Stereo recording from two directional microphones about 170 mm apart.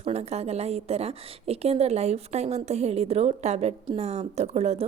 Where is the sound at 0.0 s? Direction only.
40° right (ahead or behind).